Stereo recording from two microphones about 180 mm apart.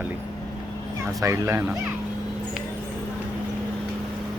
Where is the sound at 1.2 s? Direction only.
15° right (ahead or behind).